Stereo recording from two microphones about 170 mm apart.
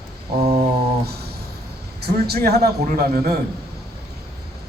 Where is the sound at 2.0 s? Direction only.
70° right (ahead or behind).